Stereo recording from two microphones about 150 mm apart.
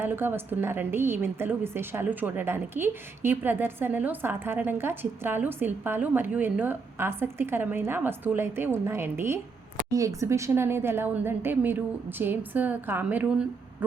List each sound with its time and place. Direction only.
0.0 s a woman's voice: 15° right (ahead or behind)